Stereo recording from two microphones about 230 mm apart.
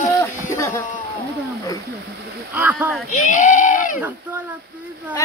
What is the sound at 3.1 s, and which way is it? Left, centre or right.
Speech, left.